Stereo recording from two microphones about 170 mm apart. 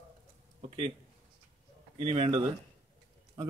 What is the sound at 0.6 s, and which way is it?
Speech, 35° right (ahead or behind).